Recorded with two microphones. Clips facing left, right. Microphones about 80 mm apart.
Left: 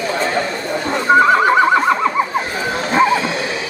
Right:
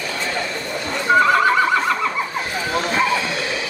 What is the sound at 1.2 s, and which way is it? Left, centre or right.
Neigh, left.